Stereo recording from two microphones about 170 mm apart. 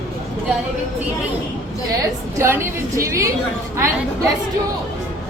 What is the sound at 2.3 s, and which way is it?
Speech, 15° right (ahead or behind).